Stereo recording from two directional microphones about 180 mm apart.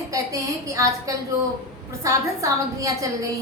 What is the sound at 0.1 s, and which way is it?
A woman's voice, 20° right (ahead or behind).